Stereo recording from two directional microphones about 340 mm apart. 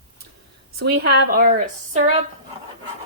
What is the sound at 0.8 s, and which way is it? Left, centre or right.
A woman's voice, right.